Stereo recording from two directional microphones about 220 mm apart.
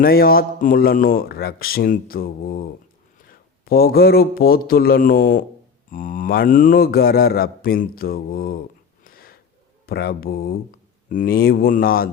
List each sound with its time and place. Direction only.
0.0 s speech: 45° left (ahead or behind)
9.0 s a sound: 40° left (ahead or behind)
9.8 s speech: 45° left (ahead or behind)